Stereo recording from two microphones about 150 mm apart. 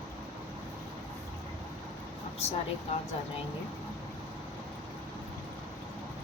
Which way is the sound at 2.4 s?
45° left (ahead or behind).